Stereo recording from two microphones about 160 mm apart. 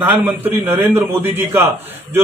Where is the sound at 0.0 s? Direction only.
10° right (ahead or behind).